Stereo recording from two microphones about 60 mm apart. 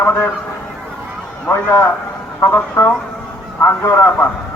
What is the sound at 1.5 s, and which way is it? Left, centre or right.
A man's voice, left.